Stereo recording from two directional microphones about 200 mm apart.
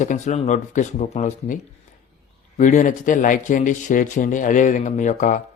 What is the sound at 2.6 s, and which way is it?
Speech, 40° left (ahead or behind).